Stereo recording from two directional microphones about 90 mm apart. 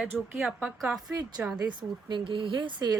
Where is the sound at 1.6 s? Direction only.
60° right (ahead or behind).